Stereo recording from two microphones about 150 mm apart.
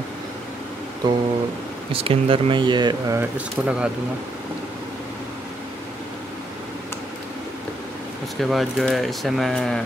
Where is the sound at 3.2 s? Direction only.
10° right (ahead or behind).